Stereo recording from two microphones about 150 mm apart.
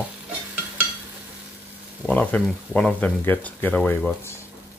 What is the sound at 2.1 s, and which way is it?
Speech, 10° left (ahead or behind).